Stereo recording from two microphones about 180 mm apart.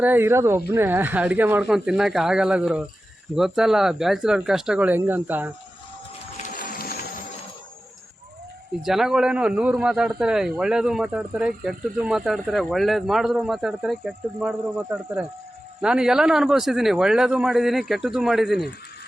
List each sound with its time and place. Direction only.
0.0 s speech: 10° right (ahead or behind)
6.3 s boat: 50° left (ahead or behind)
8.8 s speech: centre (ahead or behind)
15.8 s speech: 5° right (ahead or behind)